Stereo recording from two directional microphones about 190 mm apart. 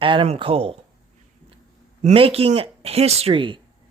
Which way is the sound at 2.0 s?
30° right (ahead or behind).